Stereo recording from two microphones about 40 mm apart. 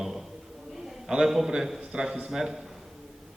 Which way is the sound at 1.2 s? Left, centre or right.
Centre.